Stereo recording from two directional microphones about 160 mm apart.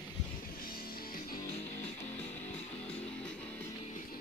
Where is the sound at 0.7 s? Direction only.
65° left (ahead or behind).